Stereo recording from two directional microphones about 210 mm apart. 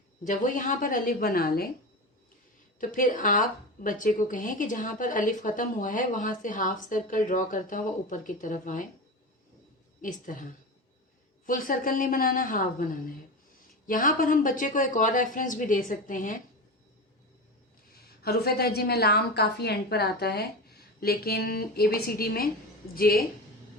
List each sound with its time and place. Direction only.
0.3 s a woman's voice: 40° left (ahead or behind)
2.8 s a woman's voice: 40° left (ahead or behind)
10.0 s a woman's voice: 40° left (ahead or behind)
13.8 s a woman's voice: 40° left (ahead or behind)
18.2 s a woman's voice: 50° left (ahead or behind)